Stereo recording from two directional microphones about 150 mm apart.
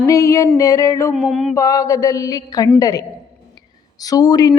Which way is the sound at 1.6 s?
25° left (ahead or behind).